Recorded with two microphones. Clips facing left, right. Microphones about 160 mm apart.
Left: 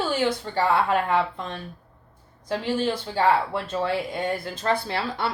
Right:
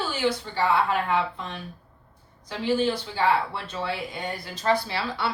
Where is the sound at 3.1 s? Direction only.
45° left (ahead or behind).